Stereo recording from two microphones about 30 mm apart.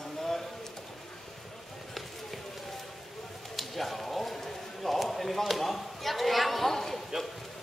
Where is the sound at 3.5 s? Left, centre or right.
Centre.